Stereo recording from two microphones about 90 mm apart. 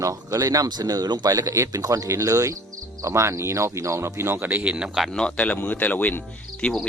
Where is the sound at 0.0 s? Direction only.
40° right (ahead or behind); by 5.0 s 10° right (ahead or behind).